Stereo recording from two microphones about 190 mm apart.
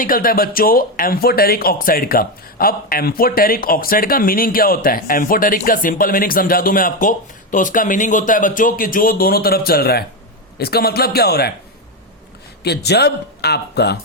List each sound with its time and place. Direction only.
0.0 s speech: 50° left (ahead or behind)
12.6 s speech: 60° left (ahead or behind)